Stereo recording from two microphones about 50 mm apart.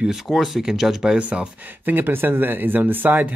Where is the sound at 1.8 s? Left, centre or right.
Right.